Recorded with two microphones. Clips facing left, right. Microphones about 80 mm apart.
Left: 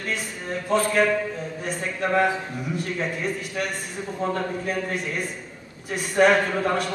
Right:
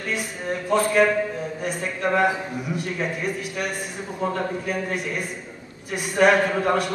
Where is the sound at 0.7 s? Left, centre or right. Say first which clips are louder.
Right 2 dB; centre.